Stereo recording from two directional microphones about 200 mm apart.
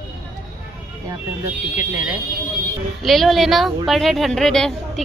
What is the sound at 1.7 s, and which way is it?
A woman's voice, 10° right (ahead or behind).